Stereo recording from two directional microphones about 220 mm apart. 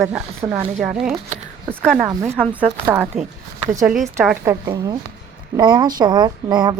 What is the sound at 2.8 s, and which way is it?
Speech, 5° right (ahead or behind).